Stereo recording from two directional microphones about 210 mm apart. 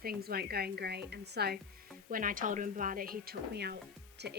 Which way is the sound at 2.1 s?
40° right (ahead or behind).